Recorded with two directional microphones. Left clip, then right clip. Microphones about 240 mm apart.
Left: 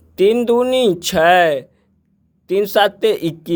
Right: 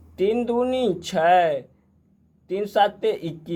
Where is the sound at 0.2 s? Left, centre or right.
Left.